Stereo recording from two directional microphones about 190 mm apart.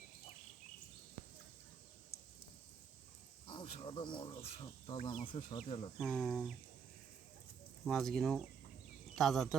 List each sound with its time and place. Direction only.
3.4 s speech: 30° left (ahead or behind)
6.0 s speech: centre (ahead or behind)
7.9 s speech: centre (ahead or behind)